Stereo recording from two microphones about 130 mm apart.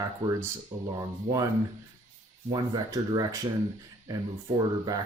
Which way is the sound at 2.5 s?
30° right (ahead or behind).